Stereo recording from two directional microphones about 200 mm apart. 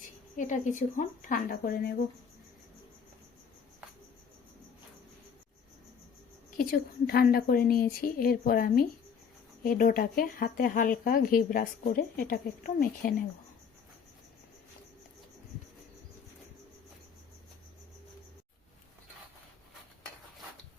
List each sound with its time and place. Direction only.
0.3 s a woman's voice: 40° left (ahead or behind)
6.6 s speech: 50° left (ahead or behind)